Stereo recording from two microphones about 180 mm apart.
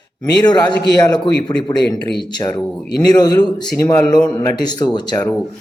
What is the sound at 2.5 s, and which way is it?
Speech, 5° left (ahead or behind).